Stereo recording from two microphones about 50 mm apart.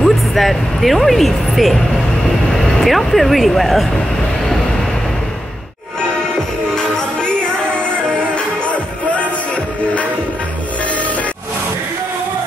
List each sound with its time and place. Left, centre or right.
0.3 s speech: centre
2.8 s speech: centre
6.7 s music: centre
8.6 s music: left